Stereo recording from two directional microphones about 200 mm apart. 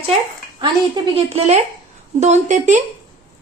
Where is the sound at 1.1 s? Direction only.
30° right (ahead or behind).